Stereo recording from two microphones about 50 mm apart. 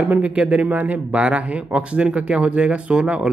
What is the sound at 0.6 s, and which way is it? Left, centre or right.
Speech, right.